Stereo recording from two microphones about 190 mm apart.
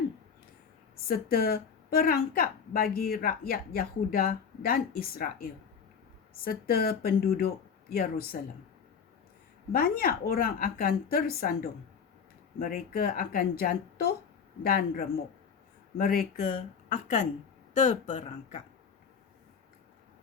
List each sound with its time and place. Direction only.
1.0 s speech: 50° left (ahead or behind)
9.7 s speech: 50° left (ahead or behind)